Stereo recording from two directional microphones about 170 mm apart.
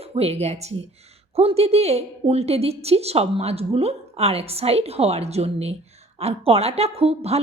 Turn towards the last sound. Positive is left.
turn(degrees=-40)  # may be behind; listen again after turning